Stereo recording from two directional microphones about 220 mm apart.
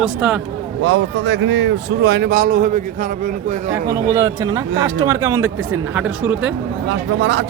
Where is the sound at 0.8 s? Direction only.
55° right (ahead or behind); by 3.6 s 35° right (ahead or behind).